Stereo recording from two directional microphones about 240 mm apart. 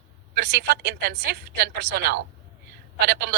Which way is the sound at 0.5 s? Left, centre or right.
Right.